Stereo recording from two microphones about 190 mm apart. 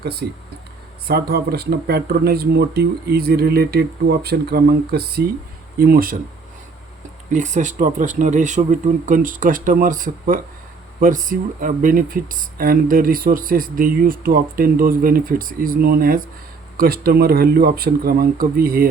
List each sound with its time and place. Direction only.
0.0 s speech: 55° right (ahead or behind)
7.3 s speech: 40° right (ahead or behind)